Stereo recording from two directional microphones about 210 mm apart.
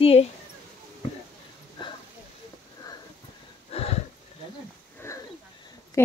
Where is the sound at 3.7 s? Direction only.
30° left (ahead or behind).